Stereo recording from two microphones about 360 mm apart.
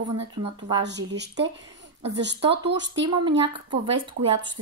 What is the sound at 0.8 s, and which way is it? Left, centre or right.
Speech, right.